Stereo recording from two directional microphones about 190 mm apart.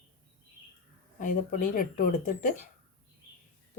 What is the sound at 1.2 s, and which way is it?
Speech, 45° left (ahead or behind).